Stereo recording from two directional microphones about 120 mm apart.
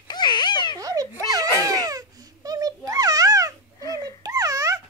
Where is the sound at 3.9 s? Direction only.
30° right (ahead or behind).